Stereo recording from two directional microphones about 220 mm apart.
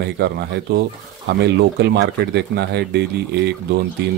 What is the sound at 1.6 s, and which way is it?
Speech, 50° right (ahead or behind).